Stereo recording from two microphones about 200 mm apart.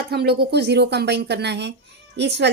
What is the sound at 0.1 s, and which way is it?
A woman's voice, 55° right (ahead or behind).